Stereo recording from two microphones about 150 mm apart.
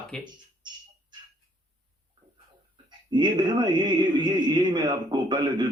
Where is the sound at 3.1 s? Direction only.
30° right (ahead or behind).